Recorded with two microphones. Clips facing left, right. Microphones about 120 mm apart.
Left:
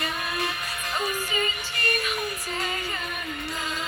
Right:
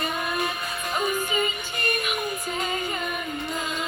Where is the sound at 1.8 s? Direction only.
20° right (ahead or behind).